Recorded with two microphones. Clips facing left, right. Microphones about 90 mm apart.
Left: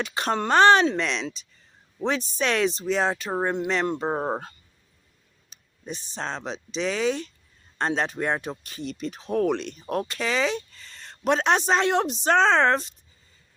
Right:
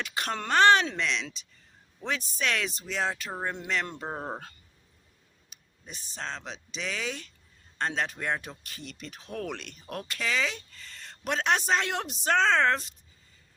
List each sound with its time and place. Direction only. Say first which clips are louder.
0.0 s speech: left 7 dB; 25° left (ahead or behind)
4.0 s speech: left 9 dB; 50° left (ahead or behind)
5.5 s speech: left 11 dB; 25° left (ahead or behind)